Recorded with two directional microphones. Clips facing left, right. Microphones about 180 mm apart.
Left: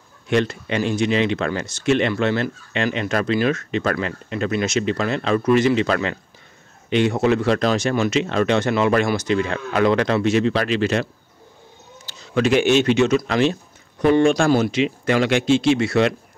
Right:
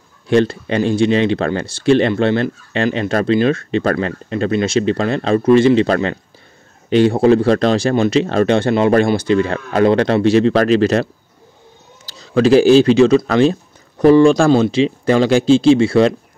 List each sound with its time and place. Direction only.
0.3 s speech: 35° right (ahead or behind)
12.1 s speech: 35° right (ahead or behind)